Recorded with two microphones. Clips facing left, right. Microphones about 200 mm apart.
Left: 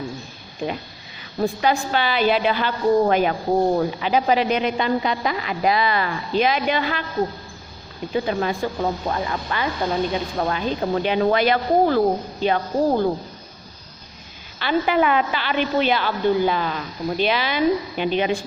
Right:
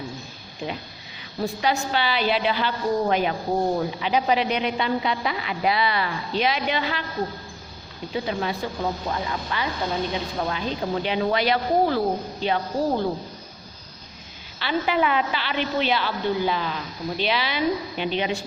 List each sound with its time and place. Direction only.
1.4 s a woman's voice: 50° left (ahead or behind)
8.1 s a woman's voice: 50° left (ahead or behind)
14.6 s a woman's voice: 50° left (ahead or behind)